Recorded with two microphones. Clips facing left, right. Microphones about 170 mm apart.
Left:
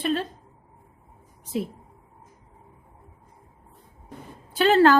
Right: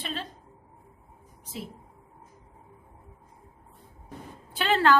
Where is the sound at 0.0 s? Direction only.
50° left (ahead or behind).